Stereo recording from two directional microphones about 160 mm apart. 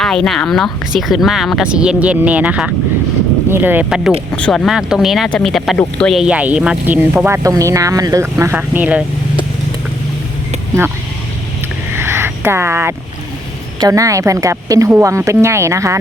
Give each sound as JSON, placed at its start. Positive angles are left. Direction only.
{"t": 0.0, "sound": "speech", "side_deg": 5}
{"t": 11.9, "sound": "a sound", "side_deg": -15}
{"t": 13.7, "sound": "speech", "side_deg": -20}